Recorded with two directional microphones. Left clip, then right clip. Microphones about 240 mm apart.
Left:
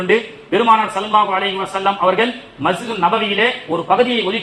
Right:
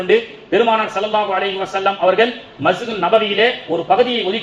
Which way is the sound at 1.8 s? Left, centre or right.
Left.